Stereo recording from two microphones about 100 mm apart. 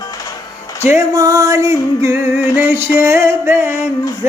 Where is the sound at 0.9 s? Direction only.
35° right (ahead or behind).